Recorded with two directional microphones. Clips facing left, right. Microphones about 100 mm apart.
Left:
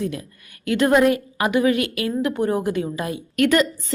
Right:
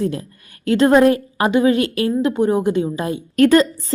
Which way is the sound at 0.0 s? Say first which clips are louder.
Right 5 dB; 35° right (ahead or behind).